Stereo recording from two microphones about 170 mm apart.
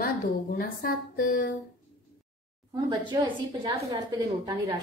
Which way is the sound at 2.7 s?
25° right (ahead or behind).